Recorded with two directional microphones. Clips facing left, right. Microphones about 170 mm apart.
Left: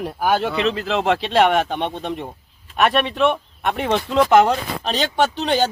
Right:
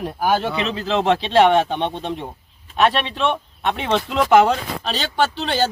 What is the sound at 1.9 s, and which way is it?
Speech, centre (ahead or behind).